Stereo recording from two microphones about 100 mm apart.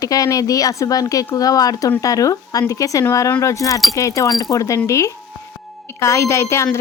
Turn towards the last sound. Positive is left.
turn(degrees=25)  # may be behind; listen again after turning